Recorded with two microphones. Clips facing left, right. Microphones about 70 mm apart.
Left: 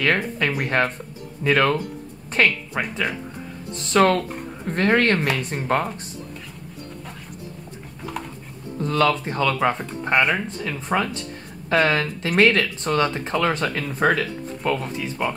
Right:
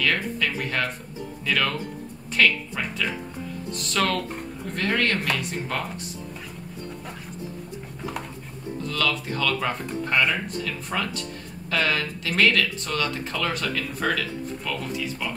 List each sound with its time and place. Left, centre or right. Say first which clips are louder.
0.0 s speech: left 3 dB; left
8.8 s speech: left 7 dB; left